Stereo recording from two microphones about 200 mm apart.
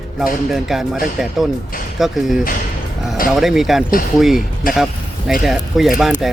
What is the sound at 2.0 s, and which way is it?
Speech, centre (ahead or behind).